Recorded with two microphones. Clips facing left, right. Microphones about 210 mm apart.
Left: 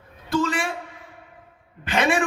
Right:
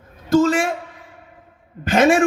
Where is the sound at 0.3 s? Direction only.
40° right (ahead or behind).